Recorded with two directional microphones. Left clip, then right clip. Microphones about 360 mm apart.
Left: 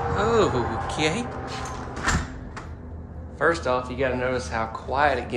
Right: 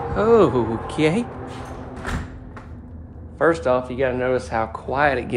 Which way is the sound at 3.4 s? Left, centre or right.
Centre.